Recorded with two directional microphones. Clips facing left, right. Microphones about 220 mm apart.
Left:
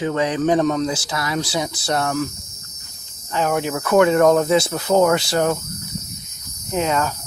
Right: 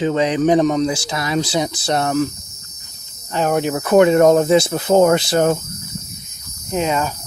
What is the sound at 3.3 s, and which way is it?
Cricket, 35° right (ahead or behind).